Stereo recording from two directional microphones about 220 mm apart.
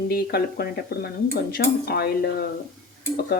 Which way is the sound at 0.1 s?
45° left (ahead or behind).